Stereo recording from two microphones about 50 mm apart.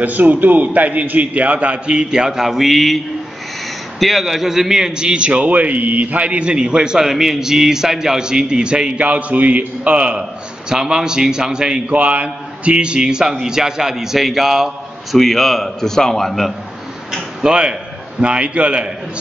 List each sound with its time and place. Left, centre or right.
0.0 s a man's voice: right; by 3.0 s centre
4.0 s a man's voice: centre; by 10.2 s right
10.7 s a man's voice: centre
11.9 s a man's voice: right; by 16.5 s centre
17.4 s a man's voice: centre